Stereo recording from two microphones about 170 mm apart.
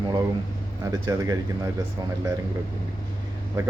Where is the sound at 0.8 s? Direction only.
20° right (ahead or behind).